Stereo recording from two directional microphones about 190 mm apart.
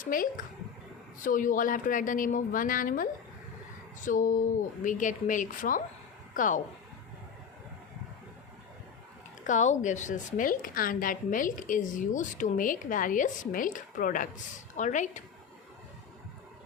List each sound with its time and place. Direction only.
0.0 s a woman's voice: 45° left (ahead or behind)
9.5 s a woman's voice: 40° left (ahead or behind)